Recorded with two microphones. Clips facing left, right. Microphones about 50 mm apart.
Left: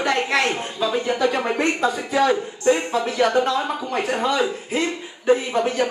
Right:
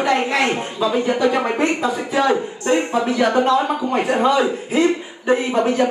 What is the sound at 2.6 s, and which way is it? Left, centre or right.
Speech, right.